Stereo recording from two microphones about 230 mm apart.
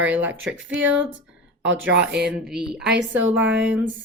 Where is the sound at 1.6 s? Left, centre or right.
Right.